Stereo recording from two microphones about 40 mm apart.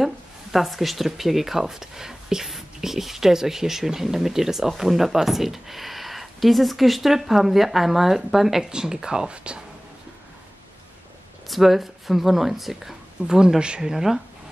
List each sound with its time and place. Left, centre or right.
0.0 s speech: centre; by 9.6 s right
11.4 s speech: centre
13.2 s speech: right
13.6 s speech: right